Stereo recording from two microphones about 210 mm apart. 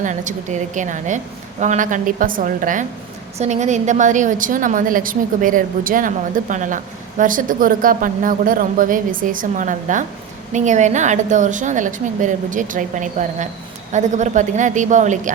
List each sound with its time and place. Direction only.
0.0 s a woman's voice: 35° right (ahead or behind)